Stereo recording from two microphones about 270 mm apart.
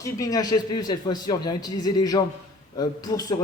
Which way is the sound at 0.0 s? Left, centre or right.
Centre.